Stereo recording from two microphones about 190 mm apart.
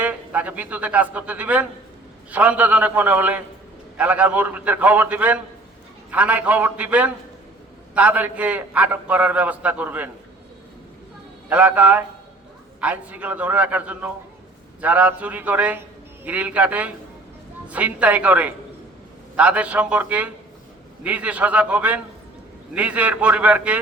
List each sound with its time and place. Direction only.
0.0 s a man's voice: 10° right (ahead or behind)
11.4 s a man's voice: 10° right (ahead or behind)